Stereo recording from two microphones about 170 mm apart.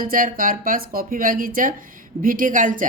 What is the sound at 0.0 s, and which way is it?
A woman's voice, 55° right (ahead or behind).